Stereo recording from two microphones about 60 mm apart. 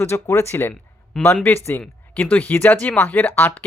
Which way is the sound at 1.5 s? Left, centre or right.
Left.